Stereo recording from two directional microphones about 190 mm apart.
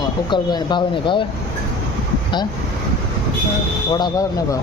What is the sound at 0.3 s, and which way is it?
Speech, 25° left (ahead or behind).